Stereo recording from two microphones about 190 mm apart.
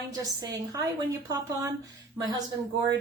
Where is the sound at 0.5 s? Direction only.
20° right (ahead or behind).